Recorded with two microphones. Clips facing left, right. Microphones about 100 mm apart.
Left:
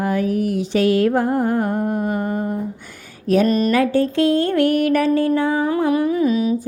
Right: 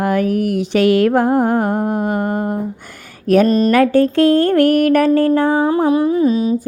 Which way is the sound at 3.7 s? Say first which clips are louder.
Right 5 dB; 60° right (ahead or behind).